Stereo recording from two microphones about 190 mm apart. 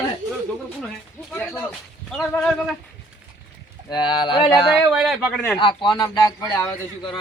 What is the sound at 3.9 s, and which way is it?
Speech, 20° left (ahead or behind).